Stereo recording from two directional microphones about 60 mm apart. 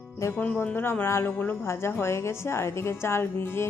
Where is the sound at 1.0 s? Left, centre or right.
Left.